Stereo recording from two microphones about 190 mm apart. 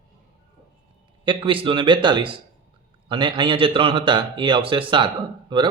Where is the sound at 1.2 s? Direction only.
25° right (ahead or behind).